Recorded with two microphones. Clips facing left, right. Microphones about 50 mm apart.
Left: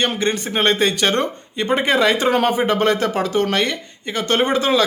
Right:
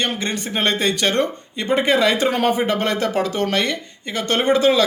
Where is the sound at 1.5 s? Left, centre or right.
Centre.